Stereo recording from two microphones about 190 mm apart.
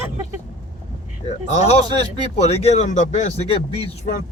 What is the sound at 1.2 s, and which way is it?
Speech, 35° left (ahead or behind).